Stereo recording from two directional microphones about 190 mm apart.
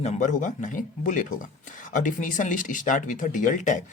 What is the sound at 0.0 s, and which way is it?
Speech, 40° left (ahead or behind).